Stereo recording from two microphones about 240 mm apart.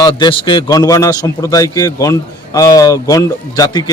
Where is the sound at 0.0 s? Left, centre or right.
Centre.